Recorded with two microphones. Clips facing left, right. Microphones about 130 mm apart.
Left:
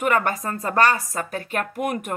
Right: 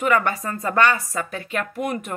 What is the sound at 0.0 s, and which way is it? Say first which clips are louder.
Speech: right 1 dB; 45° left (ahead or behind).